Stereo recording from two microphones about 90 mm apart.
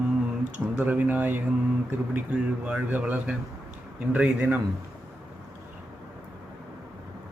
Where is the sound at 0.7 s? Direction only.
15° right (ahead or behind).